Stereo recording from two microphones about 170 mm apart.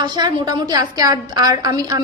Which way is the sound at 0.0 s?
25° right (ahead or behind).